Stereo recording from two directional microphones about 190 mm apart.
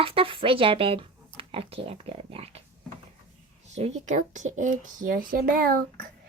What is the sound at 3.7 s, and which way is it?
Speech, 35° right (ahead or behind).